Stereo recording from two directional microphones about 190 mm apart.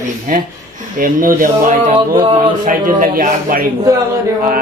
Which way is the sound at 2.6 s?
45° right (ahead or behind).